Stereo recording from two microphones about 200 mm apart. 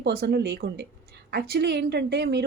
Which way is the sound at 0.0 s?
55° right (ahead or behind).